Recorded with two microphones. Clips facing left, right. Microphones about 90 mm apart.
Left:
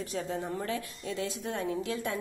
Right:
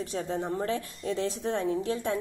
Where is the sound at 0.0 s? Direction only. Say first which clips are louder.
Right 3 dB; 30° right (ahead or behind).